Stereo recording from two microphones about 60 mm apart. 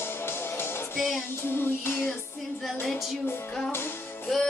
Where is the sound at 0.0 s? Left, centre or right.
Left.